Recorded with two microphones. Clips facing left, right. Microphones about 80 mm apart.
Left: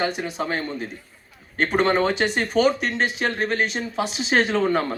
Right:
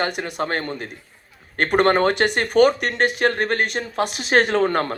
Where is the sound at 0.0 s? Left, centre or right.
Right.